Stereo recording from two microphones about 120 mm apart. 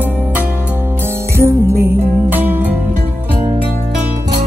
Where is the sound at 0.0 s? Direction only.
15° right (ahead or behind).